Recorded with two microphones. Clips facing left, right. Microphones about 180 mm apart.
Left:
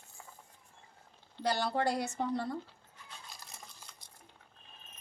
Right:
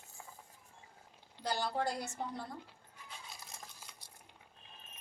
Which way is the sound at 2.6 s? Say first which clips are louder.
Even; 10° right (ahead or behind).